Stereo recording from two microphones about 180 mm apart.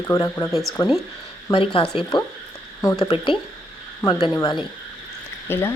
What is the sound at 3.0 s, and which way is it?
Speech, 30° left (ahead or behind).